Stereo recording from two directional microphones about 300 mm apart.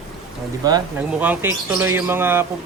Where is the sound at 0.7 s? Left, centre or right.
Centre.